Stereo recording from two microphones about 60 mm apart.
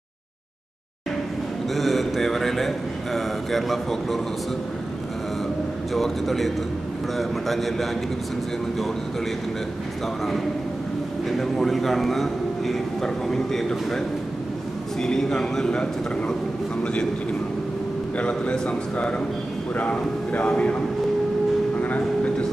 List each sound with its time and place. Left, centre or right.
1.8 s speech: centre
5.9 s a man's voice: centre
11.2 s a man's voice: centre
18.1 s a man's voice: centre
21.8 s speech: left